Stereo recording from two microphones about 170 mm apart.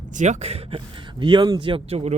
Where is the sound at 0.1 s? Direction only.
45° right (ahead or behind).